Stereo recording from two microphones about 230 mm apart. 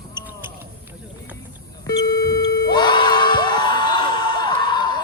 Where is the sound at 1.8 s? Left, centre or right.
Centre.